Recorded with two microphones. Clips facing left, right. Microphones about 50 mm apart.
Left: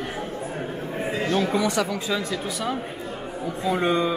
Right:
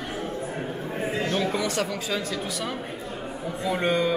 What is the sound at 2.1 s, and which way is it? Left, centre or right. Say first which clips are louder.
Speech: left 2 dB; centre.